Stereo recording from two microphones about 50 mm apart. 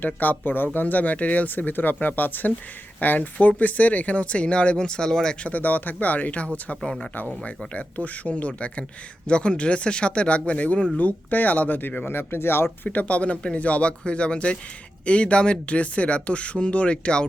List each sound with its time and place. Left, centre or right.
0.0 s speech: left; by 5.5 s centre
5.5 s speech: left
12.9 s speech: left